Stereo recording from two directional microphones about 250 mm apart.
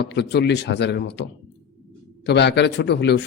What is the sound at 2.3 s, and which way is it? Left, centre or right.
Speech, left.